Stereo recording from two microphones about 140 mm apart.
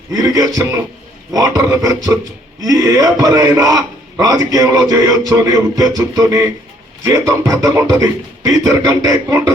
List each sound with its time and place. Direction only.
0.1 s a man's voice: 25° right (ahead or behind)